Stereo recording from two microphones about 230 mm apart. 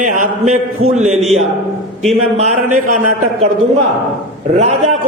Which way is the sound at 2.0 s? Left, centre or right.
Right.